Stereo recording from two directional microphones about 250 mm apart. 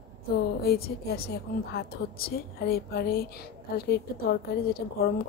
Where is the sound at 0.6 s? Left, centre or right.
Left.